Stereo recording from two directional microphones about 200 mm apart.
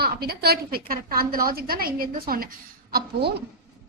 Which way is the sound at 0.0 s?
50° right (ahead or behind).